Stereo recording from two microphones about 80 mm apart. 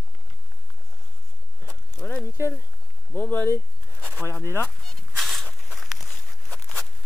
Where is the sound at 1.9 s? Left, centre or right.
Centre.